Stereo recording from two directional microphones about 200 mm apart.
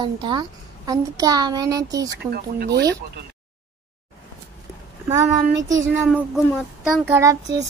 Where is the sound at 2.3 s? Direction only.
55° right (ahead or behind).